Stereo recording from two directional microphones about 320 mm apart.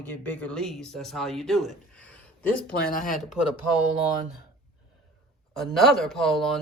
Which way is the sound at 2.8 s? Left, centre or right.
Left.